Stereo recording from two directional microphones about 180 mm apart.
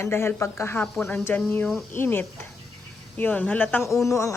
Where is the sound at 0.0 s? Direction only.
15° left (ahead or behind).